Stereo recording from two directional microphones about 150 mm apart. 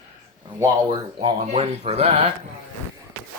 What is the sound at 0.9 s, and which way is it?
Speech, 35° right (ahead or behind).